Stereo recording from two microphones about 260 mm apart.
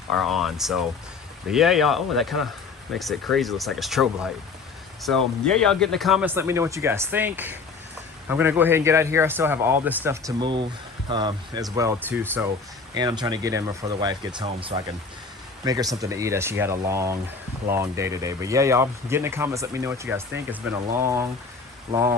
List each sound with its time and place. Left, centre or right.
0.3 s speech: centre